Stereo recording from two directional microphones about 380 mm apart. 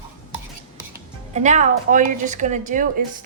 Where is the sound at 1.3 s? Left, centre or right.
Centre.